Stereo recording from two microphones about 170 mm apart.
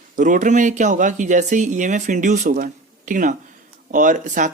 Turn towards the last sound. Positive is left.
turn(degrees=-50)  # may be behind; listen again after turning